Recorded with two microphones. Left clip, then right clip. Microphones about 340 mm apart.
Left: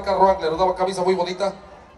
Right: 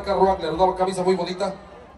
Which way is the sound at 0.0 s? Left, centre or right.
Centre.